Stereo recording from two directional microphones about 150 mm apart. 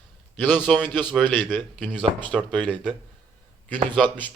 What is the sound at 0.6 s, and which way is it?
Speech, 5° left (ahead or behind).